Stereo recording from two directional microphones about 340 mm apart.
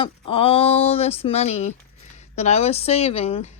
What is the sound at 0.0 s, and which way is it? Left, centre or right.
A woman's voice, centre.